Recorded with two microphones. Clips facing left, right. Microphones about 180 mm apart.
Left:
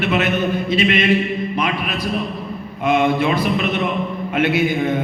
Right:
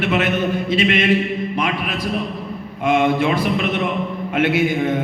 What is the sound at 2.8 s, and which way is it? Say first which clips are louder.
A man's voice: even; 90° right.